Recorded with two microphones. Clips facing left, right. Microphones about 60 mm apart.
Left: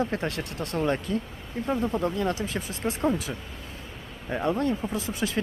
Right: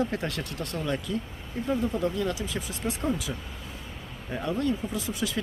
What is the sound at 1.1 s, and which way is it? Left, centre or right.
Speech, left.